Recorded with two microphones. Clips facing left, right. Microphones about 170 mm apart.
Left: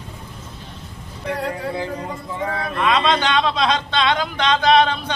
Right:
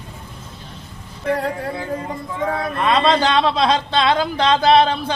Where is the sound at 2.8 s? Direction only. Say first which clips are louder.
Right 2 dB; 30° right (ahead or behind).